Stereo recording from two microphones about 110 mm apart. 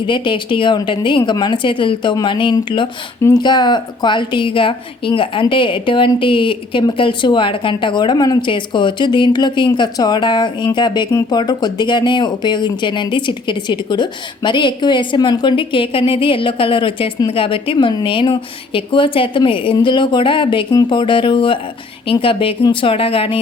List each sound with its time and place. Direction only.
0.0 s a woman's voice: 50° left (ahead or behind)